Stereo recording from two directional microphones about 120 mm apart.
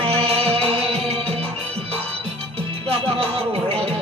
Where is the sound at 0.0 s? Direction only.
55° right (ahead or behind).